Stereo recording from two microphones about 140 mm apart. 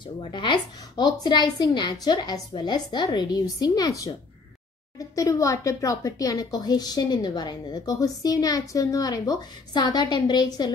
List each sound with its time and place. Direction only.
0.0 s a woman's voice: 35° left (ahead or behind)